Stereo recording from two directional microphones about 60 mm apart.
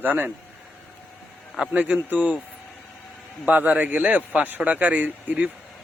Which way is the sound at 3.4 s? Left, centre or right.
Right.